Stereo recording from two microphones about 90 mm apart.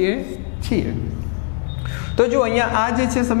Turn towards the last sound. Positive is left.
turn(degrees=15)  # may be behind; listen again after turning